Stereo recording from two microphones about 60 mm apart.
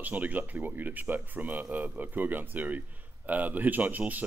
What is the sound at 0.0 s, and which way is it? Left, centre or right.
Speech, right.